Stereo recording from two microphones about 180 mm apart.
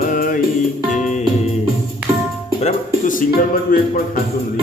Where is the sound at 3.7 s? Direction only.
50° left (ahead or behind).